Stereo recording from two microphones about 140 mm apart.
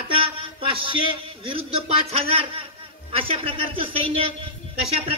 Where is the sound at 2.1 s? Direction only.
45° right (ahead or behind).